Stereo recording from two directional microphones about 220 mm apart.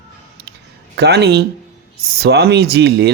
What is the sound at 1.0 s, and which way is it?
Speech, 50° right (ahead or behind).